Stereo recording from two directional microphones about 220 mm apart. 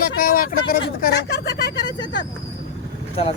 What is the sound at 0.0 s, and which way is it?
Speech, 40° left (ahead or behind).